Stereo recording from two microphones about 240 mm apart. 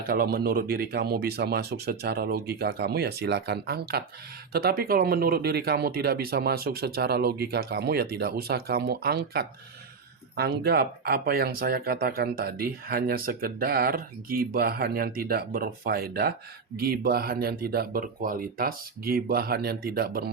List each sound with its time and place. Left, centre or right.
0.1 s speech: right